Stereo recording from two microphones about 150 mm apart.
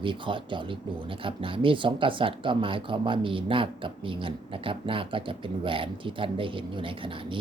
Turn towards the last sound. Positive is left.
turn(degrees=-35)  # may be behind; listen again after turning